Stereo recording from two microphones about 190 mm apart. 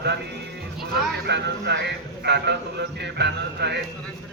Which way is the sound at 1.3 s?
65° right (ahead or behind).